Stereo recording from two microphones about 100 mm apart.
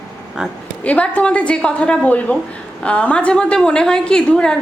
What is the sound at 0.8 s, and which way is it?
A woman's voice, 15° left (ahead or behind).